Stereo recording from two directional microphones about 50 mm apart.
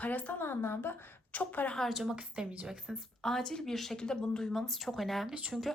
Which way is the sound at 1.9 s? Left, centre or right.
Centre.